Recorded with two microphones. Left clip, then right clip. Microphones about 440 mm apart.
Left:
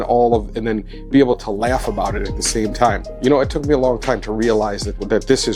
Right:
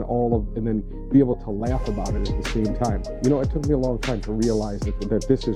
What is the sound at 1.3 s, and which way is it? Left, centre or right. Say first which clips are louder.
Speech: left 9 dB; centre.